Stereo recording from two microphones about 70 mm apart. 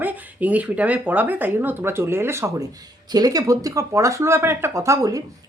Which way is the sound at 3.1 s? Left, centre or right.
Right.